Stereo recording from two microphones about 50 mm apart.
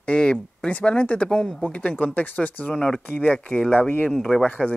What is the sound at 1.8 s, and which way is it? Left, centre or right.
Speech, left.